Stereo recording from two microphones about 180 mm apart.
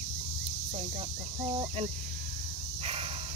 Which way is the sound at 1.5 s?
30° right (ahead or behind).